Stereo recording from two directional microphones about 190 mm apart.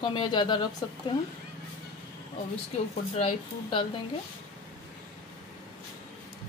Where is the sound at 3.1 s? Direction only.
30° left (ahead or behind).